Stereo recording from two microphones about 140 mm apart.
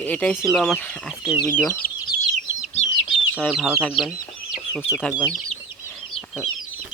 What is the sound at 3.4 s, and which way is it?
Speech, 5° right (ahead or behind).